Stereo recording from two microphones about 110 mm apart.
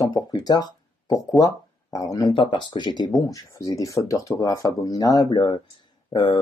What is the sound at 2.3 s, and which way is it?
A woman's voice, 45° left (ahead or behind).